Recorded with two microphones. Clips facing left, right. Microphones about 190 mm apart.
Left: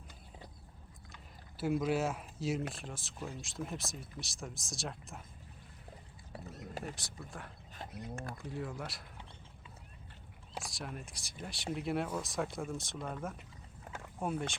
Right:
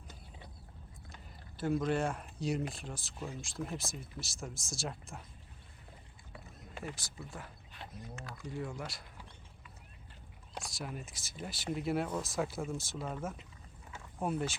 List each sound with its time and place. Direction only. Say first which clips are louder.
1.5 s speech: even; 5° left (ahead or behind)
6.8 s speech: even; centre (ahead or behind)
8.2 s speech: left 4 dB; 55° left (ahead or behind)
8.4 s speech: right 2 dB; centre (ahead or behind)
10.5 s speech: right 1 dB; centre (ahead or behind)